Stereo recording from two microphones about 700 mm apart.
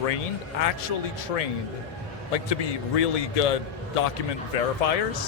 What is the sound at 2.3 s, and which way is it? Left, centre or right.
A man's voice, left.